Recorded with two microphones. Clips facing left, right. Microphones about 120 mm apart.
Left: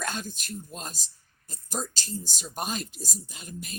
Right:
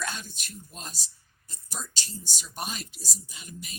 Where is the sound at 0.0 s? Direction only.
45° left (ahead or behind).